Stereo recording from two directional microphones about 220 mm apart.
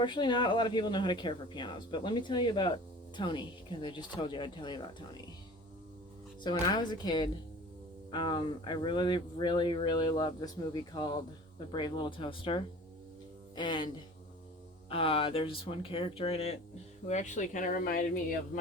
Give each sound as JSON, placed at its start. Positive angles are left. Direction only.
{"t": 0.0, "sound": "speech", "side_deg": 20}
{"t": 6.4, "sound": "speech", "side_deg": 20}